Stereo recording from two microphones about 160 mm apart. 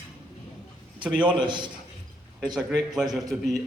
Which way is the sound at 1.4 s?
30° right (ahead or behind).